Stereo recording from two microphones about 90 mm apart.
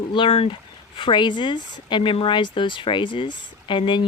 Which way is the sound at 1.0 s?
60° left (ahead or behind).